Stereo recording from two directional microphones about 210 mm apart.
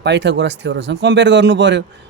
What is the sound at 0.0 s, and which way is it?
Speech, 55° right (ahead or behind).